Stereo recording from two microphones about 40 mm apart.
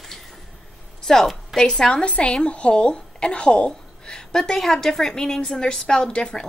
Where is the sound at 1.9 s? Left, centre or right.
Left.